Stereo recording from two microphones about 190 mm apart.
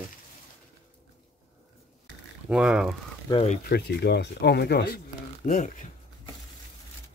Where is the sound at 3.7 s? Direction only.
60° left (ahead or behind).